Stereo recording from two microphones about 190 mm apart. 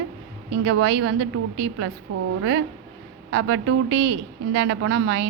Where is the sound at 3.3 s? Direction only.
80° right.